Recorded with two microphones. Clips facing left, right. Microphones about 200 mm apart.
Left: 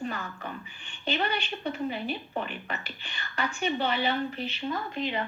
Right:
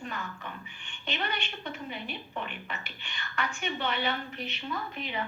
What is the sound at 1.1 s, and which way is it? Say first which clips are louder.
A woman's voice: left 5 dB; 35° left (ahead or behind).